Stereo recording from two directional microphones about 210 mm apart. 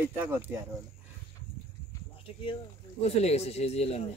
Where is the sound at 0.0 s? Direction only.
10° right (ahead or behind).